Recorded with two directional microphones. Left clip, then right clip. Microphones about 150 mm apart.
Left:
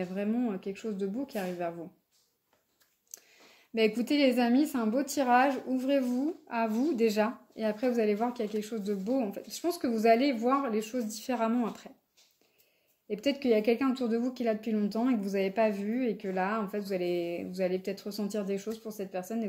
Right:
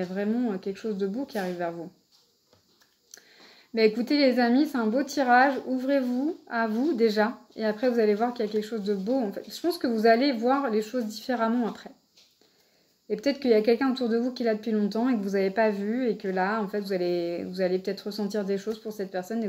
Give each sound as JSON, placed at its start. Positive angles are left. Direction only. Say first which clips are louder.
{"t": 0.0, "sound": "speech", "louder": "right 4 dB", "side_deg": 30}
{"t": 3.7, "sound": "speech", "louder": "right 5 dB", "side_deg": 35}
{"t": 13.1, "sound": "speech", "louder": "right 5 dB", "side_deg": 30}